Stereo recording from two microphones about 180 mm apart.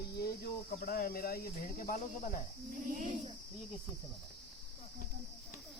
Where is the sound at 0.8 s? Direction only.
55° left (ahead or behind).